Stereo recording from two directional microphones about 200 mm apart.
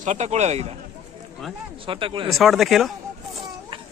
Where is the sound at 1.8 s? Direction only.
25° right (ahead or behind).